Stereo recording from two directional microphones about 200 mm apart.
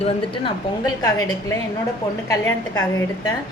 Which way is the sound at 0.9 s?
20° left (ahead or behind).